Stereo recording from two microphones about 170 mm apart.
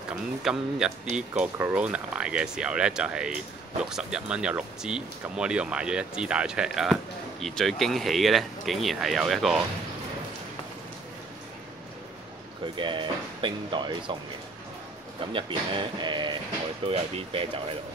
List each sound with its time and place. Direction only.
0.1 s speech: 5° right (ahead or behind)
12.7 s speech: 30° right (ahead or behind)
15.3 s speech: 30° right (ahead or behind)